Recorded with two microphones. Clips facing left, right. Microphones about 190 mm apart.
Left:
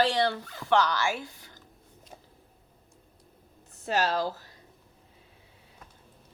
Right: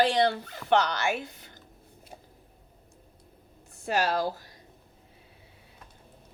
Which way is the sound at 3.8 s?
10° right (ahead or behind).